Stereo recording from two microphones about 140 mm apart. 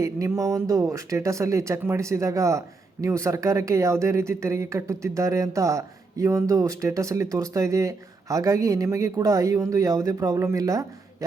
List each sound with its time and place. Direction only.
0.0 s speech: 20° right (ahead or behind)